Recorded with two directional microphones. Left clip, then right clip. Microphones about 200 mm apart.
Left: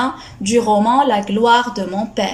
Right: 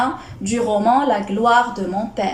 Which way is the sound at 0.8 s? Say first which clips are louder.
Left 2 dB; 45° left (ahead or behind).